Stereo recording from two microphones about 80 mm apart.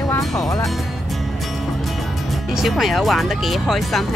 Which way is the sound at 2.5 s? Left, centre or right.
Centre.